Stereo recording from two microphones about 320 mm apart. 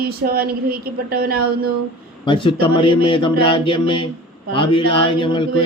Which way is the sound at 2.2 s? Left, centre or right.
Centre.